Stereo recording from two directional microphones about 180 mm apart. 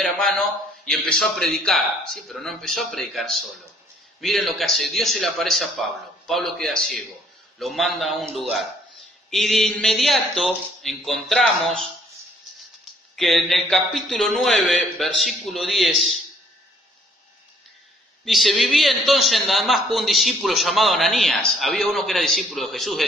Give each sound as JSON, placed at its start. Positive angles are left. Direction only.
{"t": 0.0, "sound": "a sound", "side_deg": 0}
{"t": 0.9, "sound": "a man's voice", "side_deg": 0}
{"t": 13.1, "sound": "a man's voice", "side_deg": 0}
{"t": 18.3, "sound": "a man's voice", "side_deg": 0}